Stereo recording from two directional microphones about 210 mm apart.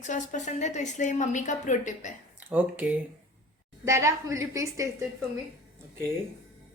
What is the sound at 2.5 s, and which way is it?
A woman's voice, 10° right (ahead or behind).